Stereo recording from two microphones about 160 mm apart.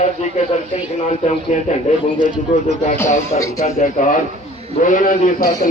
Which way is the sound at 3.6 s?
45° left (ahead or behind).